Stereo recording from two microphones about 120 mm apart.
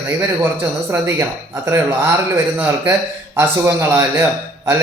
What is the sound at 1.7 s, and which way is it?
Speech, 15° right (ahead or behind).